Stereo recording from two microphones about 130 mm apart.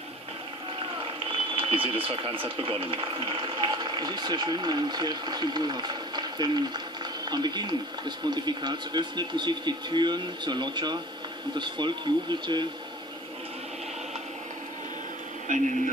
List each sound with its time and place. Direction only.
1.2 s speech: 45° right (ahead or behind)
15.4 s speech: 80° right